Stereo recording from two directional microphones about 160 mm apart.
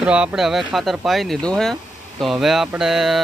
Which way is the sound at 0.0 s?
5° right (ahead or behind).